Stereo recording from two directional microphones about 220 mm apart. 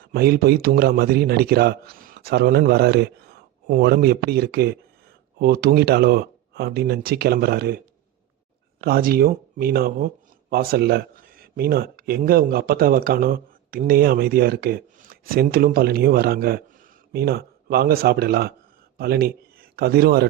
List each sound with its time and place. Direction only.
0.1 s speech: 45° right (ahead or behind)
8.8 s speech: 40° right (ahead or behind)